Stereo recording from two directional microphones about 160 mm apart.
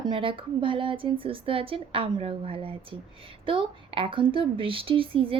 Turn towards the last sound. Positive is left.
turn(degrees=-35)  # may be behind; listen again after turning